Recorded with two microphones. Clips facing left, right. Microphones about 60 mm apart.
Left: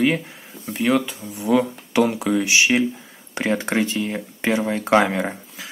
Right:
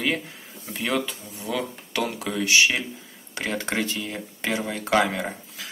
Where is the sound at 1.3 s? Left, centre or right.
Centre.